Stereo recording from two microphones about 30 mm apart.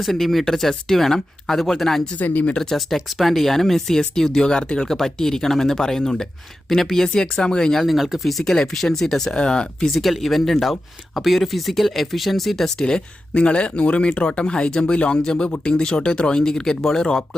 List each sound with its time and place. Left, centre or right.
0.0 s speech: centre
2.1 s speech: left
2.7 s speech: centre
4.4 s speech: left
4.9 s speech: centre
7.1 s speech: left
7.9 s speech: centre
8.2 s speech: centre
9.3 s speech: left
9.9 s speech: centre
12.7 s speech: left
13.3 s speech: left
15.4 s speech: left
15.7 s speech: left